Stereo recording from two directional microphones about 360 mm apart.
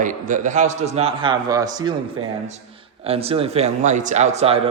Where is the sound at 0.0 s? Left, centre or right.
Right.